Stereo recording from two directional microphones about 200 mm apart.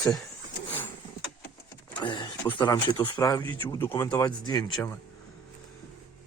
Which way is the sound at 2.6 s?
25° left (ahead or behind).